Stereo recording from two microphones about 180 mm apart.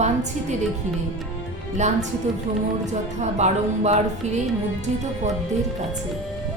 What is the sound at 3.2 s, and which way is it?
Speech, 40° right (ahead or behind).